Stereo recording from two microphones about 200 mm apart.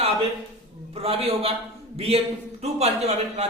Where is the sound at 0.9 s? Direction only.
30° right (ahead or behind).